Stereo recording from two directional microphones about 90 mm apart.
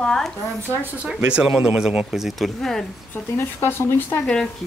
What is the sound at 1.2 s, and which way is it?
Speech, 10° right (ahead or behind).